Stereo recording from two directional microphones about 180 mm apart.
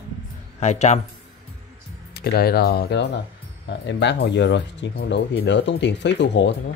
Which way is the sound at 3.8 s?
80° left.